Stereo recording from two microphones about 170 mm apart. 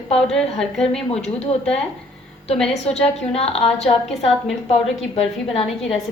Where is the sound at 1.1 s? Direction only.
40° left (ahead or behind).